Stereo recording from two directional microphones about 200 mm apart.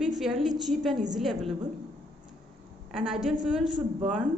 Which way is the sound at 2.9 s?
Centre (ahead or behind).